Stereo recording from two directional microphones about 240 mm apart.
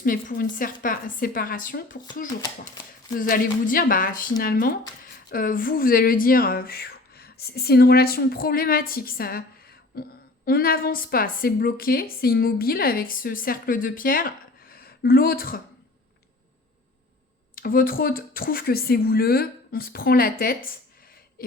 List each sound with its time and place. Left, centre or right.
0.0 s speech: left
3.2 s speech: left
17.5 s speech: left